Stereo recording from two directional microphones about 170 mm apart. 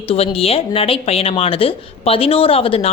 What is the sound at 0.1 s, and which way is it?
Speech, 35° left (ahead or behind).